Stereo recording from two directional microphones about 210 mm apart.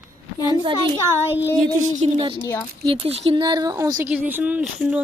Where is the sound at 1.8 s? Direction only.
30° right (ahead or behind).